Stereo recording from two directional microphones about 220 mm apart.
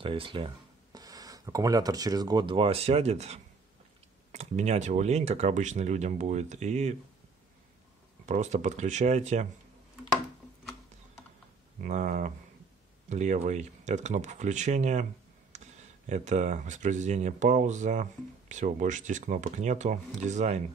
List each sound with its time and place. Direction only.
0.0 s speech: 25° right (ahead or behind)
8.3 s speech: 30° right (ahead or behind)
11.8 s speech: 35° right (ahead or behind)